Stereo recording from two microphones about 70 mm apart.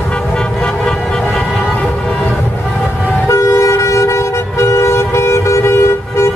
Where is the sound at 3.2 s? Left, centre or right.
Left.